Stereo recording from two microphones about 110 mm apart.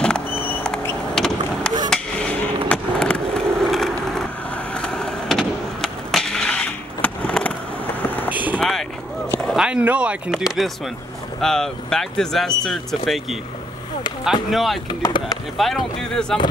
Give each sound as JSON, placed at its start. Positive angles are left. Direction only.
{"t": 1.1, "sound": "vehicle", "side_deg": 5}
{"t": 1.9, "sound": "skateboard", "side_deg": 10}
{"t": 4.7, "sound": "vehicle", "side_deg": 5}
{"t": 5.8, "sound": "skateboard", "side_deg": 5}
{"t": 8.0, "sound": "vehicle", "side_deg": 15}
{"t": 8.3, "sound": "vehicle", "side_deg": -15}
{"t": 8.5, "sound": "a sound", "side_deg": 5}
{"t": 9.5, "sound": "speech", "side_deg": -5}
{"t": 14.5, "sound": "speech", "side_deg": 0}
{"t": 14.9, "sound": "speech", "side_deg": 40}
{"t": 15.5, "sound": "speech", "side_deg": 0}